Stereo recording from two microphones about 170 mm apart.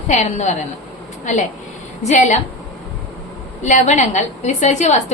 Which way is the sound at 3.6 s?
45° left (ahead or behind).